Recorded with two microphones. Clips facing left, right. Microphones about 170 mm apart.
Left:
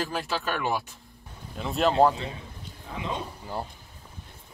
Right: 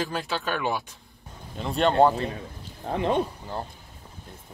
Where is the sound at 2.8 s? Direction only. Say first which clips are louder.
Right 9 dB; 65° right (ahead or behind).